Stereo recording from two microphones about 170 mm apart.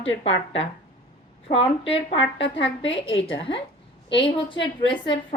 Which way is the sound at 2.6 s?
90° left.